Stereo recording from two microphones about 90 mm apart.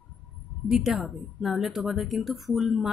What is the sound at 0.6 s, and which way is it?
Speech, 5° right (ahead or behind).